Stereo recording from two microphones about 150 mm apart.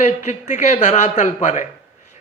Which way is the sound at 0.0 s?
50° left (ahead or behind).